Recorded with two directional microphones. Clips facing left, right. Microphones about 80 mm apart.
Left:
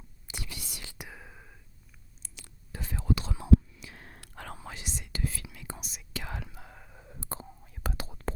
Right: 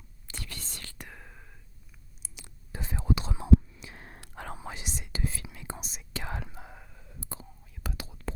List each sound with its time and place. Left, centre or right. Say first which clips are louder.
0.3 s whispering: even; centre
2.3 s whispering: right 1 dB; right
6.9 s whispering: left 7 dB; left